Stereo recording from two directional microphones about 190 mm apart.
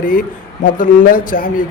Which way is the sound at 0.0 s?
45° left (ahead or behind).